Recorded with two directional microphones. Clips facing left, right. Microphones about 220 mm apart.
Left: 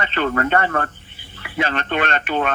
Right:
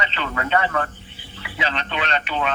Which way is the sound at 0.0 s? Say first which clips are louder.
Left 6 dB; 50° left (ahead or behind).